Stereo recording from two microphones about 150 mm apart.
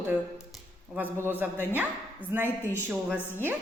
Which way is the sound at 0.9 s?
5° left (ahead or behind).